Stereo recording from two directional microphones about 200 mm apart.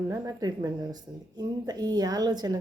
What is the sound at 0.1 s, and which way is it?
Speech, 15° right (ahead or behind).